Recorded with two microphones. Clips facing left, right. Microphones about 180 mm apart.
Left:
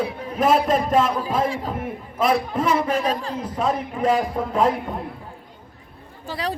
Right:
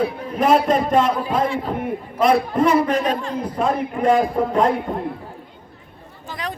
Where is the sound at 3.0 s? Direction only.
35° left (ahead or behind).